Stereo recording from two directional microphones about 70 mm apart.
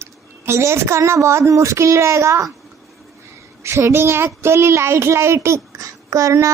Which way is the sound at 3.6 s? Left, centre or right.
Right.